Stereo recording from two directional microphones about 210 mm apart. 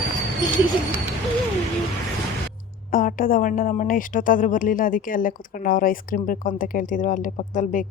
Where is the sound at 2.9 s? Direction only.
40° left (ahead or behind).